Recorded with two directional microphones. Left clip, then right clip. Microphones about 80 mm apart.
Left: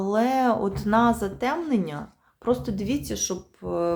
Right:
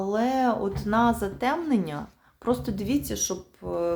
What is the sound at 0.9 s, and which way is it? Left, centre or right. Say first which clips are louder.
Speech: left 2 dB; left.